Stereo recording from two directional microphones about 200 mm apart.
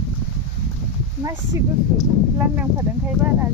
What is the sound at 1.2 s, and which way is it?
Speech, 15° right (ahead or behind).